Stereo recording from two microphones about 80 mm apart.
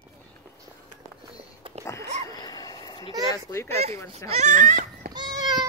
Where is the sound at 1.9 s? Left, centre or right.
Left.